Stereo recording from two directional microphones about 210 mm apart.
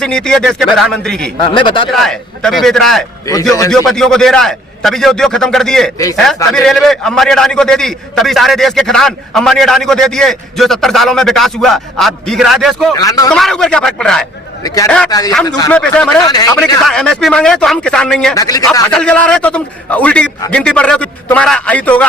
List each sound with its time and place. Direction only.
0.0 s a man's voice: 5° left (ahead or behind)
1.5 s speech: 25° left (ahead or behind)
1.9 s a man's voice: centre (ahead or behind)
3.2 s speech: 15° left (ahead or behind)
3.8 s a man's voice: centre (ahead or behind)
12.9 s speech: 15° left (ahead or behind)
13.3 s a man's voice: centre (ahead or behind)
15.1 s speech: 15° left (ahead or behind)
15.7 s a man's voice: 5° left (ahead or behind)
16.2 s speech: 20° left (ahead or behind)
16.8 s a man's voice: centre (ahead or behind)
18.3 s speech: 15° left (ahead or behind)
18.9 s a man's voice: 5° left (ahead or behind)